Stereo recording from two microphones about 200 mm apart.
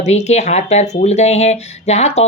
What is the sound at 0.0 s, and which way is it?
Speech, 35° left (ahead or behind).